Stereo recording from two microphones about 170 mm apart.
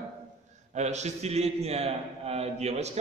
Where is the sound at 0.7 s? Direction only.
40° right (ahead or behind).